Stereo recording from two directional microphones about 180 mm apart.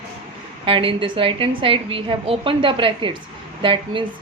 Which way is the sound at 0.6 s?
30° right (ahead or behind).